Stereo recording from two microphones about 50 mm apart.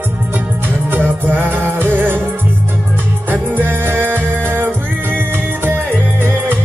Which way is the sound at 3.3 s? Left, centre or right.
Right.